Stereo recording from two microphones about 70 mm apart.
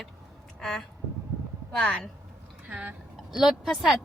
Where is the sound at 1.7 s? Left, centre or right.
Centre.